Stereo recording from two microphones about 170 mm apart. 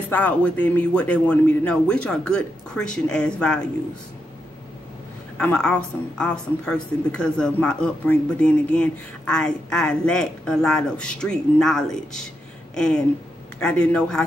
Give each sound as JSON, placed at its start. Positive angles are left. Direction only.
{"t": 0.1, "sound": "speech", "side_deg": 10}
{"t": 5.4, "sound": "a woman's voice", "side_deg": 5}
{"t": 12.7, "sound": "a sound", "side_deg": 5}
{"t": 13.6, "sound": "a woman's voice", "side_deg": 5}